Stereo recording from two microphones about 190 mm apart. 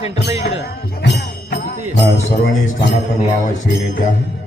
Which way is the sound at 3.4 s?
45° left (ahead or behind).